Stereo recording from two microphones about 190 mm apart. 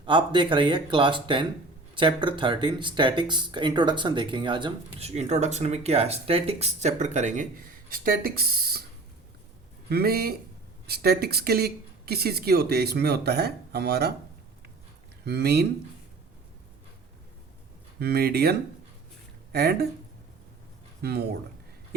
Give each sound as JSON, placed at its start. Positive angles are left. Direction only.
{"t": 0.0, "sound": "speech", "side_deg": -25}
{"t": 9.9, "sound": "speech", "side_deg": -55}
{"t": 15.2, "sound": "speech", "side_deg": -60}
{"t": 18.0, "sound": "speech", "side_deg": -55}
{"t": 21.0, "sound": "speech", "side_deg": -55}